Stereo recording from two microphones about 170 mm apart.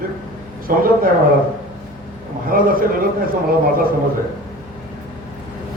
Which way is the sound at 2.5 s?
55° right (ahead or behind).